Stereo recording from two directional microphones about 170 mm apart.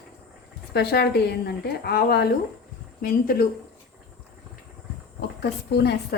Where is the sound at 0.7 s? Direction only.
70° left (ahead or behind).